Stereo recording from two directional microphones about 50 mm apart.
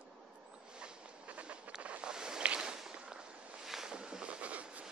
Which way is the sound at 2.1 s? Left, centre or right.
Centre.